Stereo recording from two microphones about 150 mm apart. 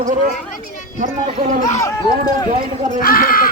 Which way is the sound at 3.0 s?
75° left (ahead or behind).